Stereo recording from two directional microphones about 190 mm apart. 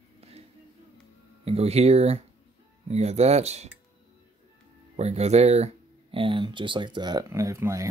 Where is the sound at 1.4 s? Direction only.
35° right (ahead or behind).